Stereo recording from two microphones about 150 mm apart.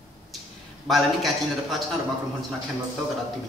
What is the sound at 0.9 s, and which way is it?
Speech, centre (ahead or behind).